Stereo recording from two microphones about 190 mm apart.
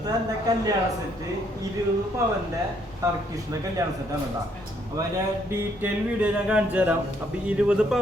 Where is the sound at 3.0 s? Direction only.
15° right (ahead or behind).